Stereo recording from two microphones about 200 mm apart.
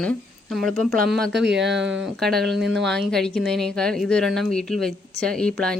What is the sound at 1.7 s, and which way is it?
Speech, 65° right (ahead or behind).